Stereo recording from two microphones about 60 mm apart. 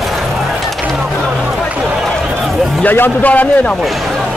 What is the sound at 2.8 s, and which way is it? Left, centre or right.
Speech, left.